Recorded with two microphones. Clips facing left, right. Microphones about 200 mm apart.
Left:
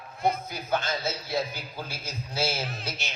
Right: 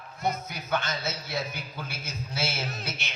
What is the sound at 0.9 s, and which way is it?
A man's voice, 30° left (ahead or behind).